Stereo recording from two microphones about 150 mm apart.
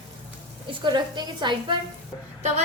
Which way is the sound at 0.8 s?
30° right (ahead or behind).